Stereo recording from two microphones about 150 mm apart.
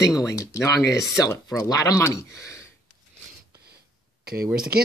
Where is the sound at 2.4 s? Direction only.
20° left (ahead or behind).